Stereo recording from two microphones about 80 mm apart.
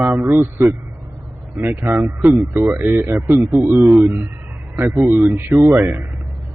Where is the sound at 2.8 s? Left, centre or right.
Right.